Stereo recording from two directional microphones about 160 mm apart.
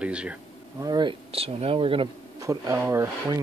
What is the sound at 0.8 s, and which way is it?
Speech, 25° right (ahead or behind).